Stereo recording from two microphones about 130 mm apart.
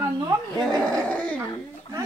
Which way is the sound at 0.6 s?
5° left (ahead or behind).